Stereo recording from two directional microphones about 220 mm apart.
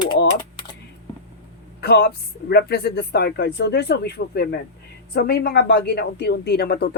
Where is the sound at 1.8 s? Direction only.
45° left (ahead or behind).